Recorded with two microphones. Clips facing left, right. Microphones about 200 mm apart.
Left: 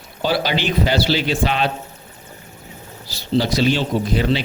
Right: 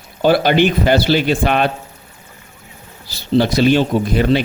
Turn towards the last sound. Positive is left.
turn(degrees=-55)  # may be behind; listen again after turning